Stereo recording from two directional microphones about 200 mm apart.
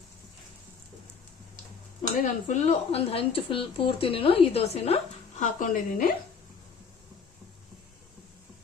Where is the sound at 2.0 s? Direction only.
35° left (ahead or behind).